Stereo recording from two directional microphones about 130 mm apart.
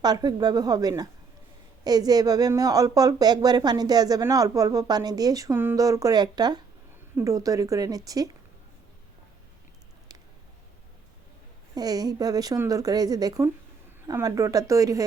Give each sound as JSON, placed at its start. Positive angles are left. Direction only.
{"t": 0.0, "sound": "a woman's voice", "side_deg": -30}
{"t": 11.7, "sound": "speech", "side_deg": -30}